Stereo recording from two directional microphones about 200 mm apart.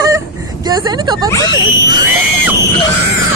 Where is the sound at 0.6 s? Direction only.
20° right (ahead or behind).